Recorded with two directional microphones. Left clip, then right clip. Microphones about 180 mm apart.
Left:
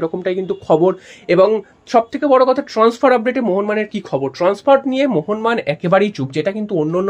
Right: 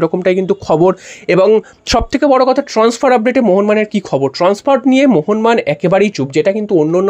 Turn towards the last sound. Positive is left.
turn(degrees=-30)  # may be behind; listen again after turning